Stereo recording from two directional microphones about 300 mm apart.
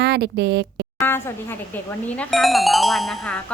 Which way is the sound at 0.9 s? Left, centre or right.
Centre.